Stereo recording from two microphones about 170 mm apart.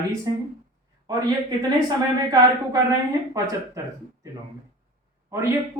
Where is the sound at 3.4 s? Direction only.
20° right (ahead or behind).